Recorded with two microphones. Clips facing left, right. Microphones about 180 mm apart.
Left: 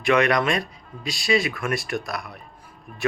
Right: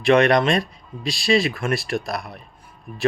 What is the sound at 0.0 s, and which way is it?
Speech, 30° right (ahead or behind).